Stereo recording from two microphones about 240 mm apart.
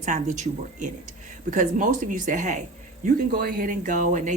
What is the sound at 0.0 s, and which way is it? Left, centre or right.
Speech, right.